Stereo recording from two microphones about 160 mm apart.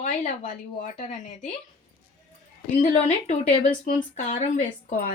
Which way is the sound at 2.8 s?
40° left (ahead or behind).